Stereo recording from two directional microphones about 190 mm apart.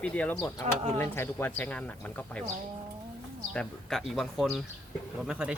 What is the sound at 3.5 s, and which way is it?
A man's voice, centre (ahead or behind).